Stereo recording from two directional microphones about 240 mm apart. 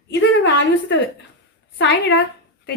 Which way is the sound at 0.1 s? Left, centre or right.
Left.